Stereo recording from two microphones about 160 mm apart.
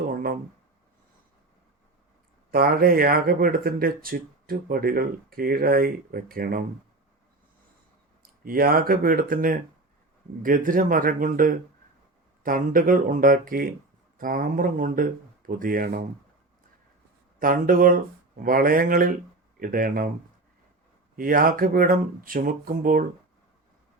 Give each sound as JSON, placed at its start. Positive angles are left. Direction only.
{"t": 2.5, "sound": "speech", "side_deg": -65}
{"t": 8.2, "sound": "speech", "side_deg": -65}
{"t": 17.4, "sound": "speech", "side_deg": -60}
{"t": 21.2, "sound": "speech", "side_deg": -60}